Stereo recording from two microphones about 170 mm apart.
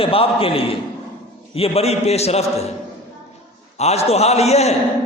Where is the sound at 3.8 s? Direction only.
40° left (ahead or behind).